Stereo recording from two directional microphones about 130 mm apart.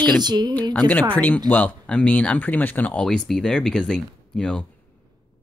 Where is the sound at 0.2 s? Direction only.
35° right (ahead or behind).